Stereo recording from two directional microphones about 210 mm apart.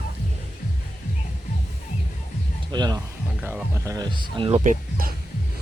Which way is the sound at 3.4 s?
10° right (ahead or behind).